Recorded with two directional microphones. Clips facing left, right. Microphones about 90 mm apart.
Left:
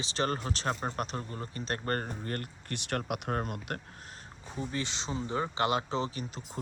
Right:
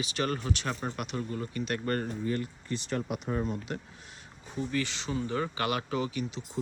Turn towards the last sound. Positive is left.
turn(degrees=45)  # may be behind; listen again after turning